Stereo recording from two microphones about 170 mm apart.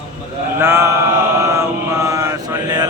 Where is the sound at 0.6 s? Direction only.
15° right (ahead or behind).